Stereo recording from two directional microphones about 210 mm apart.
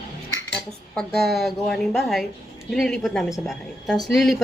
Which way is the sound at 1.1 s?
50° right (ahead or behind).